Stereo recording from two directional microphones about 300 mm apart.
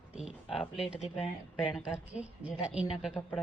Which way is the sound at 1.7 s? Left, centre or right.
Centre.